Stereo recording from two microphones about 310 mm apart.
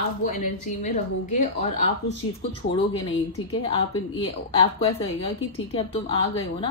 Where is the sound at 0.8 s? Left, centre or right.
Left.